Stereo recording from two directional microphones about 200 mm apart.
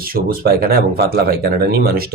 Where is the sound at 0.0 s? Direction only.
45° right (ahead or behind).